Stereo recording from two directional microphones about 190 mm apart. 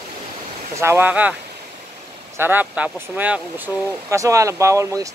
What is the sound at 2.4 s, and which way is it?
Speech, 10° right (ahead or behind).